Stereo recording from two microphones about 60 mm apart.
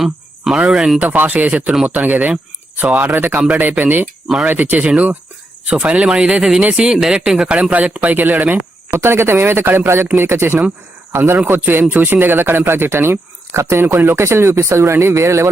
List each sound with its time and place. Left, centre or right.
0.5 s speech: centre
0.9 s speech: right
1.7 s speech: centre
2.0 s speech: right
6.8 s speech: centre
7.6 s speech: right
9.0 s speech: right
13.8 s speech: right